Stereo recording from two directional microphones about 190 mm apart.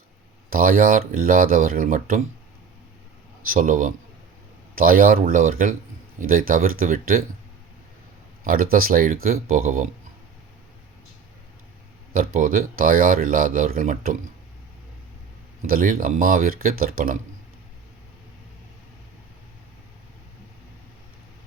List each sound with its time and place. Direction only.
0.5 s speech: 45° right (ahead or behind)
3.4 s speech: 45° right (ahead or behind)
8.7 s speech: 50° right (ahead or behind)
12.1 s speech: 45° right (ahead or behind)
15.6 s speech: 50° right (ahead or behind)